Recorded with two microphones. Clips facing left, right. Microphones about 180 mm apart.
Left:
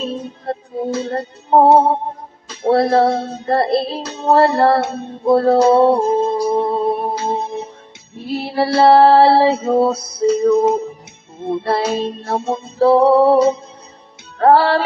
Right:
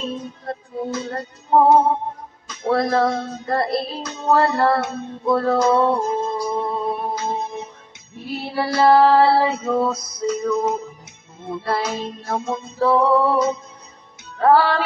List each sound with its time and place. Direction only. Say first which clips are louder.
0.0 s music: left 4 dB; 30° left (ahead or behind)